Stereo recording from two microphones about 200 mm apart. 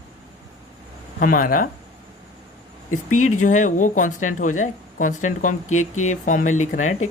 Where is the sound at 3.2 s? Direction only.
40° left (ahead or behind).